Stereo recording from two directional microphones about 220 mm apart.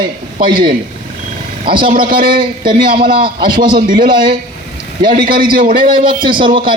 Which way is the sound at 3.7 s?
40° right (ahead or behind).